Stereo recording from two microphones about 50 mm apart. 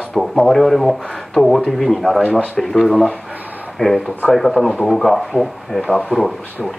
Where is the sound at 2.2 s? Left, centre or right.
Left.